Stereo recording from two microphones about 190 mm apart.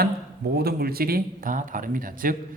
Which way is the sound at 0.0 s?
55° right (ahead or behind).